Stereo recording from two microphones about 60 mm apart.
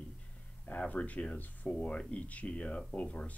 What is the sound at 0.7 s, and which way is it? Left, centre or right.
Speech, left.